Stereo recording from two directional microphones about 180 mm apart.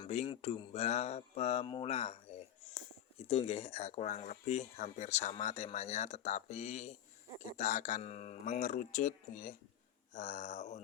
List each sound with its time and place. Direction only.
0.0 s speech: 30° left (ahead or behind)
3.2 s a man's voice: 35° left (ahead or behind)